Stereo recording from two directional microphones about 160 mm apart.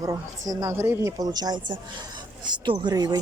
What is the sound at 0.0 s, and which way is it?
Speech, 20° right (ahead or behind).